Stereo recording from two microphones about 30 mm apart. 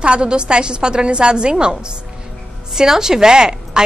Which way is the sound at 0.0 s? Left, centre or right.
Right.